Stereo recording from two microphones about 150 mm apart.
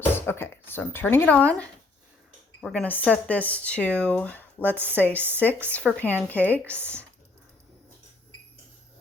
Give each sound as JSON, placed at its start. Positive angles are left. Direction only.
{"t": 0.0, "sound": "speech", "side_deg": 15}
{"t": 4.8, "sound": "speech", "side_deg": -15}
{"t": 5.0, "sound": "speech", "side_deg": 10}
{"t": 6.7, "sound": "speech", "side_deg": -15}